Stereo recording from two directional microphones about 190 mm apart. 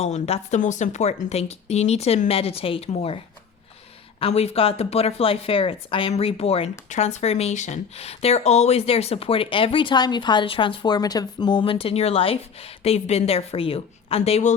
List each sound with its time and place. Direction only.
0.0 s speech: 35° left (ahead or behind)
4.2 s speech: 30° left (ahead or behind)